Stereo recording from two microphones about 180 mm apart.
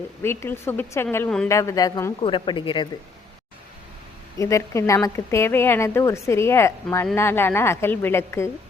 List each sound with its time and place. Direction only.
0.2 s a woman's voice: 15° left (ahead or behind)
2.2 s a woman's voice: 25° left (ahead or behind)
4.4 s a woman's voice: 15° left (ahead or behind)